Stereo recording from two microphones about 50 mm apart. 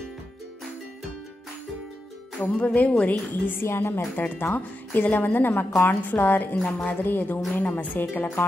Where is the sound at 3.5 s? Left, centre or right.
Left.